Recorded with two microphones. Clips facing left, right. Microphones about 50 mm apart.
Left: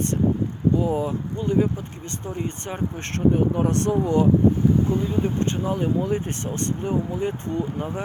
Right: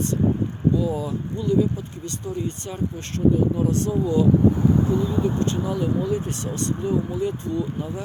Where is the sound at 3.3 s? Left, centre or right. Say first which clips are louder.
Even; left.